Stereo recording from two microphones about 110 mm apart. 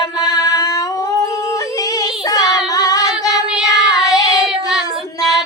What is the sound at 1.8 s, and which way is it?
Child singing, 35° left (ahead or behind).